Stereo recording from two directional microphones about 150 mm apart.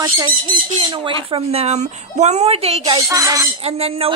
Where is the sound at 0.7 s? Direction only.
35° right (ahead or behind).